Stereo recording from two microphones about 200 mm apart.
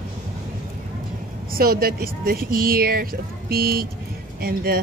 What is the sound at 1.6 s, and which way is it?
Speech, 50° right (ahead or behind).